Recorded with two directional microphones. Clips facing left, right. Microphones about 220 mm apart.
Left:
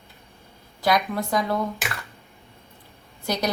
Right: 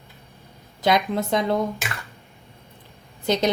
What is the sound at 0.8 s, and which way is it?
Speech, 20° right (ahead or behind).